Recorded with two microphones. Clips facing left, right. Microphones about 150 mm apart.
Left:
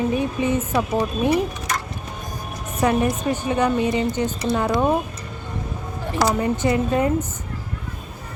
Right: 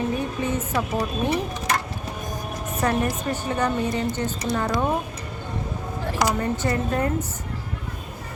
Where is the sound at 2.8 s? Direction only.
15° left (ahead or behind).